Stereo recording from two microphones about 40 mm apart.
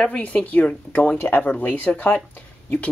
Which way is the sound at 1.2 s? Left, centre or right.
Left.